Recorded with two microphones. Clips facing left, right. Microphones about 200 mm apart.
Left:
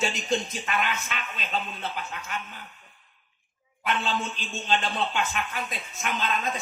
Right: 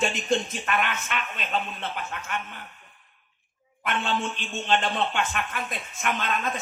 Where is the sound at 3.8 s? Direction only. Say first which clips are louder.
Right 1 dB; 55° right (ahead or behind).